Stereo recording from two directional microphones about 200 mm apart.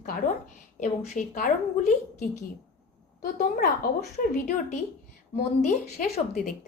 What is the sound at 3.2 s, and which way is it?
Speech, 50° left (ahead or behind).